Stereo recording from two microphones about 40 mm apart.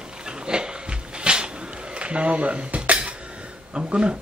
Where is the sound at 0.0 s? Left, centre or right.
Right.